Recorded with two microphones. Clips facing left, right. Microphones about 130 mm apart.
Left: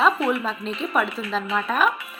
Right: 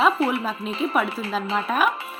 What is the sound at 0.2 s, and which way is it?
Music, 30° right (ahead or behind).